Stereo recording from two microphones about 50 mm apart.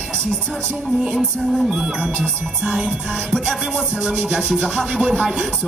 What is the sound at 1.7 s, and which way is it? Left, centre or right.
Music, centre.